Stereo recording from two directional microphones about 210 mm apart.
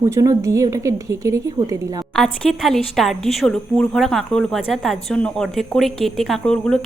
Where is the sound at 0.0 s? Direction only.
15° right (ahead or behind).